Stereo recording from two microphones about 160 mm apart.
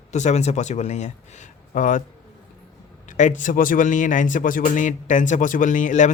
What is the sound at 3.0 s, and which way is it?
Speech, 50° left (ahead or behind).